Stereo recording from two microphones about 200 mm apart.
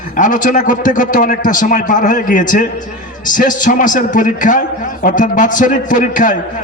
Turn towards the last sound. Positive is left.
turn(degrees=40)  # may be behind; listen again after turning